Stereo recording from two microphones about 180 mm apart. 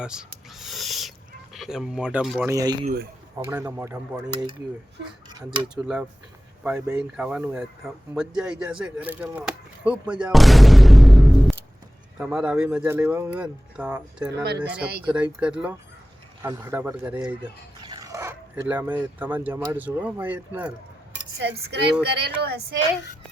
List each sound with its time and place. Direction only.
0.0 s owl: 5° right (ahead or behind)
1.5 s speech: centre (ahead or behind)
2.5 s speech: 20° right (ahead or behind)
5.6 s speech: 5° right (ahead or behind)
14.4 s cutlery: 65° right (ahead or behind)
15.0 s speech: 10° right (ahead or behind)
17.8 s speech: 20° right (ahead or behind)
21.3 s cutlery: 70° right (ahead or behind)
22.4 s a woman's voice: 65° right (ahead or behind)